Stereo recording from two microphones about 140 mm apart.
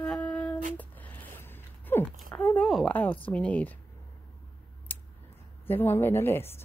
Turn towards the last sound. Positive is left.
turn(degrees=15)  # may be behind; listen again after turning